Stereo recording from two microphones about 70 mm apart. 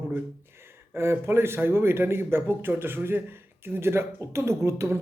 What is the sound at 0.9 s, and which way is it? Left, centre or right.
Speech, right.